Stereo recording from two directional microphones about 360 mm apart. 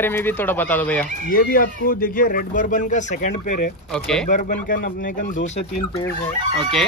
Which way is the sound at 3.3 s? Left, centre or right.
Left.